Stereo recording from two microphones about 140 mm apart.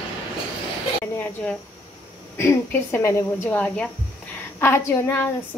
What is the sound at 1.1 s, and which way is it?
Speech, 10° left (ahead or behind).